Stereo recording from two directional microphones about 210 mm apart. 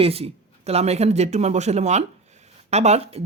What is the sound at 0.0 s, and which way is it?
Speech, 30° right (ahead or behind).